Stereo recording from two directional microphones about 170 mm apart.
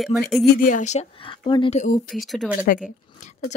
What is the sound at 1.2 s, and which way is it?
Speech, 30° left (ahead or behind).